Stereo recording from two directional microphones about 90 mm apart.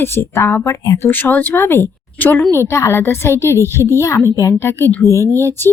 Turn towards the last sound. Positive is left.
turn(degrees=25)  # may be behind; listen again after turning